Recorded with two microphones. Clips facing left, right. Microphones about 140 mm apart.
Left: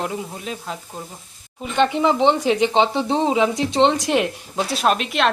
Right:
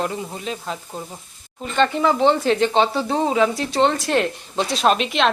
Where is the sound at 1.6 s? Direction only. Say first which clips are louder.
Left 1 dB; 15° left (ahead or behind).